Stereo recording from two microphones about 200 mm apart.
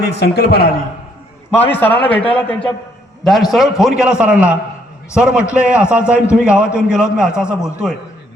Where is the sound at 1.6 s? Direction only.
10° left (ahead or behind).